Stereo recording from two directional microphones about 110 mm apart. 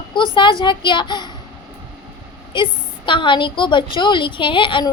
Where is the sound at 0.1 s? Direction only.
45° left (ahead or behind).